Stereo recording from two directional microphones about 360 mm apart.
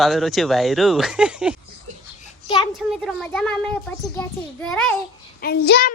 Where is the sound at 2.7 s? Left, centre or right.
Centre.